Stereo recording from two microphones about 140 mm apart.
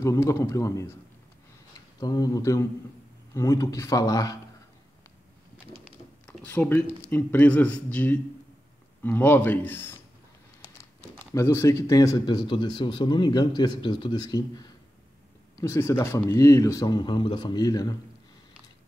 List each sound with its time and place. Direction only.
0.0 s speech: 20° left (ahead or behind)
2.0 s speech: 25° left (ahead or behind)
6.2 s speech: 10° left (ahead or behind)
11.3 s speech: 20° left (ahead or behind)